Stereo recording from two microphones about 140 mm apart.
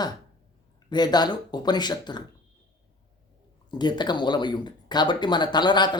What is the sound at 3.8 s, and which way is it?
Speech, 30° left (ahead or behind).